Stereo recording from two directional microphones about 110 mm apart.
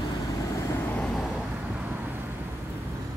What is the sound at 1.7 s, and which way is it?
Vehicle, 15° right (ahead or behind).